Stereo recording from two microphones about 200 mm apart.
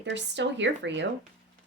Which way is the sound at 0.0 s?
60° right (ahead or behind).